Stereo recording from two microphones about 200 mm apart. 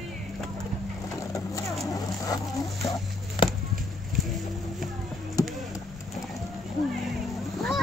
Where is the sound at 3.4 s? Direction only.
25° left (ahead or behind).